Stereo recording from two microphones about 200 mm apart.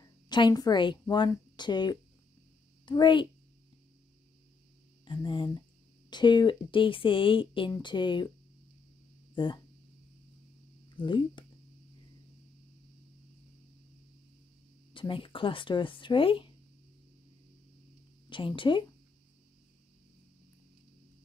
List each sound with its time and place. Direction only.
0.0 s a woman's voice: 20° left (ahead or behind)
5.0 s speech: 25° left (ahead or behind)
9.3 s speech: 25° left (ahead or behind)
11.0 s speech: 25° left (ahead or behind)
15.0 s speech: 25° left (ahead or behind)
18.3 s speech: 25° left (ahead or behind)